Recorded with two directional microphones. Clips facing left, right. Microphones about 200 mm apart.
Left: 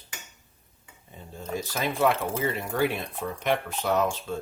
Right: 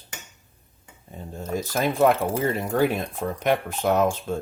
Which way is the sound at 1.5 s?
45° right (ahead or behind).